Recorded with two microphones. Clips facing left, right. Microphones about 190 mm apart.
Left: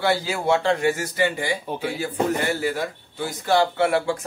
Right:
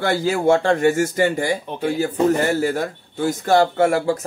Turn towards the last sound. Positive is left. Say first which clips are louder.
# right 4 dB
turn(degrees=-40)  # may be behind; listen again after turning